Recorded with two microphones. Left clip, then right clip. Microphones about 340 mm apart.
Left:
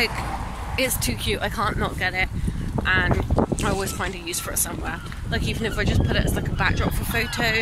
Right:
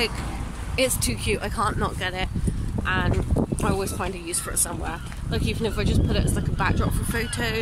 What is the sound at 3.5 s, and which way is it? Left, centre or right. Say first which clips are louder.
Speech: left 1 dB; centre.